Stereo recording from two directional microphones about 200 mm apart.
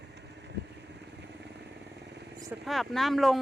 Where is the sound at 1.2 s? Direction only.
60° right (ahead or behind).